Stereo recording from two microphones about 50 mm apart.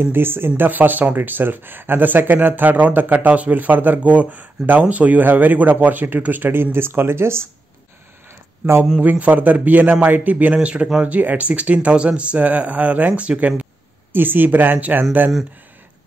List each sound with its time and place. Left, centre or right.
0.1 s speech: right
0.6 s speech: right
9.0 s speech: right
14.1 s speech: right